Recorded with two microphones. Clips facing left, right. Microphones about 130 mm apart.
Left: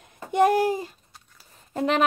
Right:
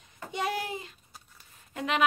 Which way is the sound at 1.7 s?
35° left (ahead or behind).